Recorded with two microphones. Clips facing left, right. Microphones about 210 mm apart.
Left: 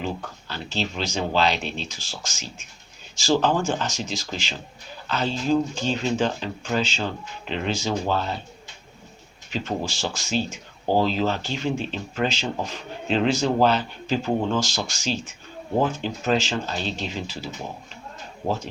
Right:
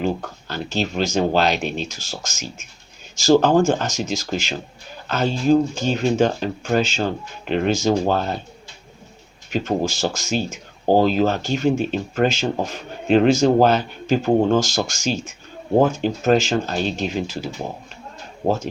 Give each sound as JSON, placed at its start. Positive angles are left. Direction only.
{"t": 0.0, "sound": "speech", "side_deg": -45}
{"t": 9.5, "sound": "speech", "side_deg": -50}